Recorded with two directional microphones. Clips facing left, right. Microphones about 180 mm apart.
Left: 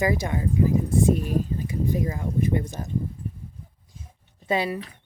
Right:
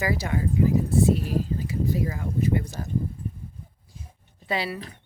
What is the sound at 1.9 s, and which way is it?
Speech, 20° left (ahead or behind).